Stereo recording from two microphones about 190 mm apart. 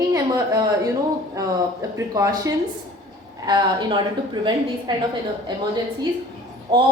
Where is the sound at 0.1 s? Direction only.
20° right (ahead or behind).